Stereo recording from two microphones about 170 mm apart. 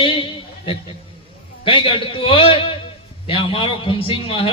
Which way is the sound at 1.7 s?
30° left (ahead or behind).